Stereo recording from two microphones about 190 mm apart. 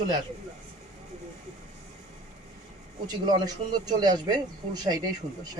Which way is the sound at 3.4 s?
20° right (ahead or behind).